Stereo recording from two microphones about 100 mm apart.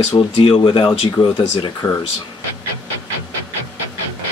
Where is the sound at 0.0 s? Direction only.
75° left (ahead or behind); by 1.0 s 55° left (ahead or behind).